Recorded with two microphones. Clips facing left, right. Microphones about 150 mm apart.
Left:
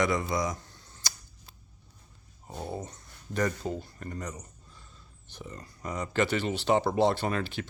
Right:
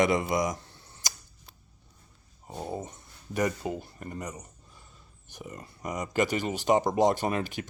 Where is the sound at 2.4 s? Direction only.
10° right (ahead or behind).